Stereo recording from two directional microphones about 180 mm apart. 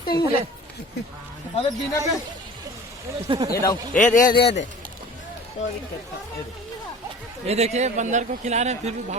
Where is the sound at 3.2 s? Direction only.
25° right (ahead or behind).